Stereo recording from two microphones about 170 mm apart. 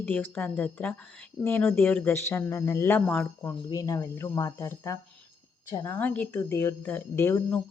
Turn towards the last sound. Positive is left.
turn(degrees=15)  # may be behind; listen again after turning